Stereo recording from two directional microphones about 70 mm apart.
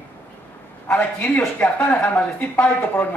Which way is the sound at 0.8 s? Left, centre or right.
Left.